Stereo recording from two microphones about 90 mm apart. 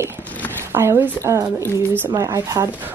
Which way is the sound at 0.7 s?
30° right (ahead or behind).